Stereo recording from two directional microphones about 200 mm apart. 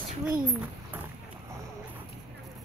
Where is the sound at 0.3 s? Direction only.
10° right (ahead or behind).